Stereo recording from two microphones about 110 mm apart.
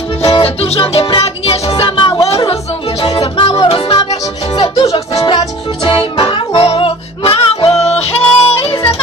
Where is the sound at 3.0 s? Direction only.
45° left (ahead or behind).